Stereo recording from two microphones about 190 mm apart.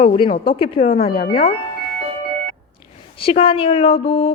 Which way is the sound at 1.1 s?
50° left (ahead or behind).